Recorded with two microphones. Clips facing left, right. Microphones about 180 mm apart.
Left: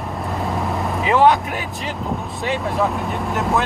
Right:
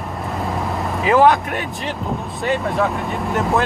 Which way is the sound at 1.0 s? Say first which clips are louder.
Right 1 dB; centre (ahead or behind).